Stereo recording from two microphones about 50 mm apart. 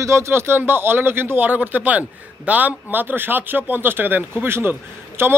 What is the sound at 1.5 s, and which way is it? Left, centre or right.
Speech, right.